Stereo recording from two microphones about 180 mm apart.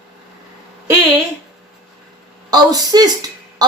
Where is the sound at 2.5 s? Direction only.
20° right (ahead or behind).